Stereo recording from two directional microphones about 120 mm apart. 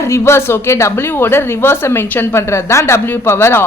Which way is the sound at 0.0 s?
20° left (ahead or behind).